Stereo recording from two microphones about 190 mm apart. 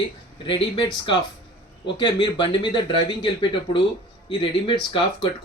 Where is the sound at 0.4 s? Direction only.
25° left (ahead or behind).